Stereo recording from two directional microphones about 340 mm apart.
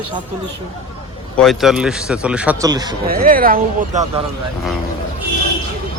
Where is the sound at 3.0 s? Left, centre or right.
Right.